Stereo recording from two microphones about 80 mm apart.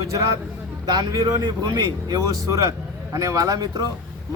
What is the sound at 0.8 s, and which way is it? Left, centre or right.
A man's voice, right.